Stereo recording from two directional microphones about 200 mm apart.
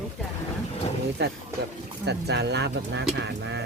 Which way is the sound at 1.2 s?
60° right (ahead or behind).